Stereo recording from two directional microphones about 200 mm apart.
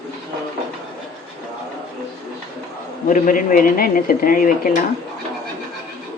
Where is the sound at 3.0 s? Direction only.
40° left (ahead or behind).